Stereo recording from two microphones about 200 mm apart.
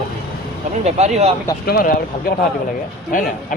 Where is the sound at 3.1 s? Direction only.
40° left (ahead or behind).